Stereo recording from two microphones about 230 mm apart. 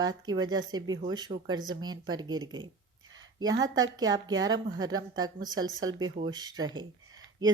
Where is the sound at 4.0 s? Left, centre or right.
Centre.